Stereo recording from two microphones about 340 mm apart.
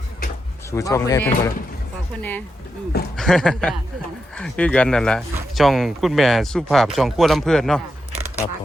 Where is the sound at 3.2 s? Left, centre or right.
Centre.